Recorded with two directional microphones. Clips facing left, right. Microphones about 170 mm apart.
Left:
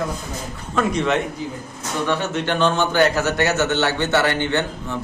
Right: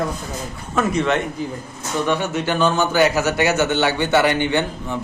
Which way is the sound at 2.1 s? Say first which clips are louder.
Right 1 dB; 10° right (ahead or behind).